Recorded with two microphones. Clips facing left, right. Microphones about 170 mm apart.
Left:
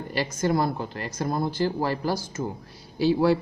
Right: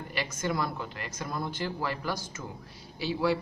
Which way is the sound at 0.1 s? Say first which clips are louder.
Left 7 dB; 35° left (ahead or behind).